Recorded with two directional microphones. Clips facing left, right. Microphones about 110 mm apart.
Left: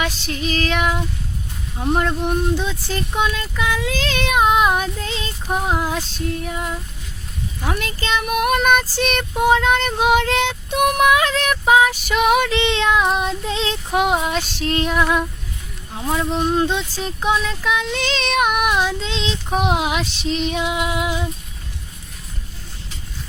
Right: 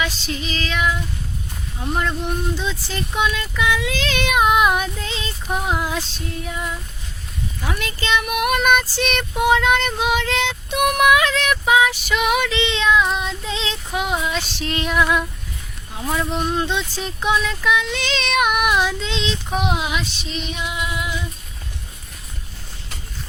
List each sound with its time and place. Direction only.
0.0 s female singing: 55° left (ahead or behind)
2.0 s female singing: 50° left (ahead or behind)
3.2 s female singing: 35° left (ahead or behind)
6.4 s female singing: 50° left (ahead or behind)
7.7 s female singing: 40° left (ahead or behind)
10.0 s female singing: 50° left (ahead or behind)
16.0 s speech: 20° left (ahead or behind)
16.3 s female singing: 35° left (ahead or behind)
19.6 s female singing: 60° left (ahead or behind); by 21.2 s 90° left